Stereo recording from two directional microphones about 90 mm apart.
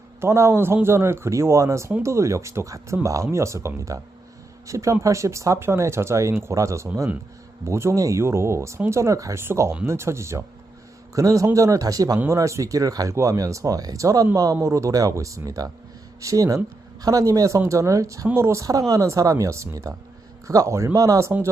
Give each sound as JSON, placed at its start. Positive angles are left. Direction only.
{"t": 0.2, "sound": "speech", "side_deg": -30}